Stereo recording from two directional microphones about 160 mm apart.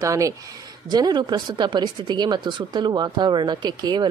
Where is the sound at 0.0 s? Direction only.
20° right (ahead or behind).